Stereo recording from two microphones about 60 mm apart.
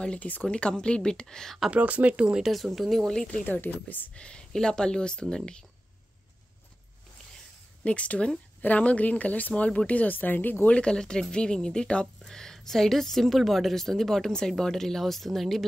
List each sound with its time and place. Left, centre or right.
0.0 s speech: left; by 1.6 s centre
1.7 s speech: right
2.4 s a woman's voice: centre
3.4 s a woman's voice: left
4.2 s speech: centre
7.8 s a woman's voice: left
10.7 s a woman's voice: centre